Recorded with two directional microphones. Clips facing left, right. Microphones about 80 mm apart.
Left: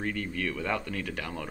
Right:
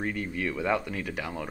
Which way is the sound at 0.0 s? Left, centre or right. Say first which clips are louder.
Right 1 dB; centre.